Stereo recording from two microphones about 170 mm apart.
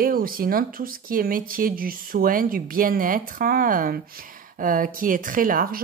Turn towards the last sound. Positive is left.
turn(degrees=-60)  # may be behind; listen again after turning